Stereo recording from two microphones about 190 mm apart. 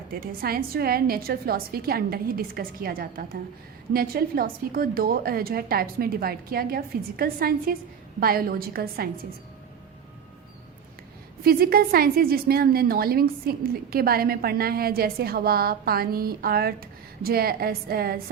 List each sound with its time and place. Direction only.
0.1 s a woman's voice: 50° right (ahead or behind)
11.4 s a woman's voice: 55° right (ahead or behind)